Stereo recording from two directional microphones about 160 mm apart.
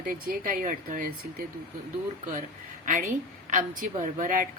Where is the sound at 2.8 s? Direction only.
55° right (ahead or behind).